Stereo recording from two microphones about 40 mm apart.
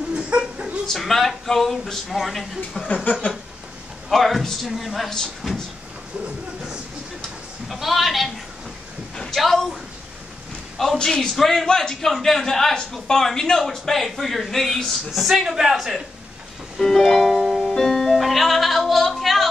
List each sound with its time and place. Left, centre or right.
0.1 s a sound: right
0.8 s speech: centre
2.9 s a sound: left
4.1 s speech: centre
5.4 s cupboard open or close: centre
7.2 s a sound: centre
9.3 s speech: centre
10.8 s a man's voice: centre
15.0 s a woman's voice: centre
16.7 s music: centre